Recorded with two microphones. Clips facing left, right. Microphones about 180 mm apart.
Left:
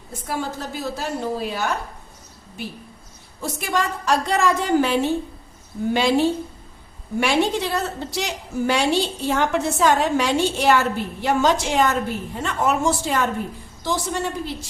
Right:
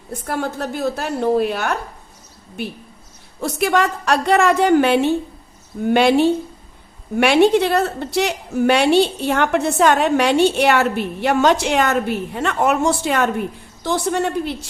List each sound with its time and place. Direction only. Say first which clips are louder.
0.3 s a woman's voice: right 4 dB; 60° right (ahead or behind)
3.4 s a woman's voice: right 6 dB; 70° right (ahead or behind)